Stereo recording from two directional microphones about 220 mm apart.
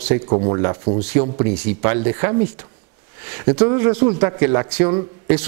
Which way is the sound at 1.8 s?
20° right (ahead or behind).